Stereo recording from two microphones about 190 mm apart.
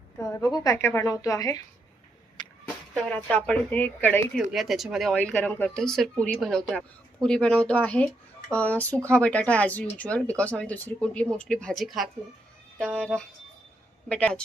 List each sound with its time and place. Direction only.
0.2 s speech: 20° left (ahead or behind)
3.0 s speech: 5° left (ahead or behind)
4.5 s a woman's voice: centre (ahead or behind)